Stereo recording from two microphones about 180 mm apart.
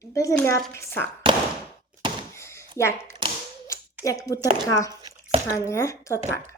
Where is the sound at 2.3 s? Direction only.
15° left (ahead or behind).